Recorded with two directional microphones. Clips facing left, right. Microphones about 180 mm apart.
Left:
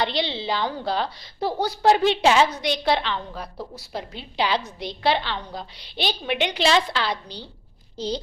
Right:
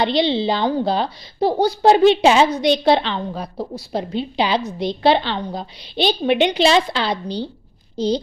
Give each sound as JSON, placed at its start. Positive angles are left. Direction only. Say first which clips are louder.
{"t": 0.0, "sound": "a woman's voice", "louder": "right 8 dB", "side_deg": -20}